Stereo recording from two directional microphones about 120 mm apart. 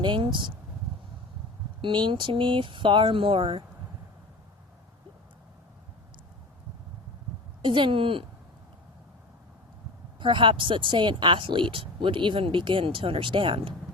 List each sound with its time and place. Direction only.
0.0 s speech: 40° right (ahead or behind)
1.8 s speech: 40° right (ahead or behind)
7.6 s speech: 40° right (ahead or behind)
10.2 s speech: 45° right (ahead or behind)